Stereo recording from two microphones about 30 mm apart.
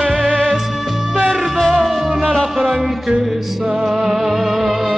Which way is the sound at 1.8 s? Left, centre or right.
Centre.